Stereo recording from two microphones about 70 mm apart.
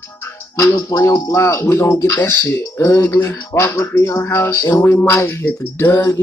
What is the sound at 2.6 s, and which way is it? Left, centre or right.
Speech, left.